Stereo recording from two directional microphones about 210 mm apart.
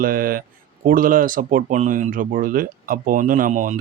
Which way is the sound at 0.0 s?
45° right (ahead or behind).